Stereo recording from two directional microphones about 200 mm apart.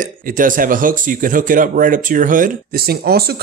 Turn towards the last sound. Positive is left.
turn(degrees=-50)  # may be behind; listen again after turning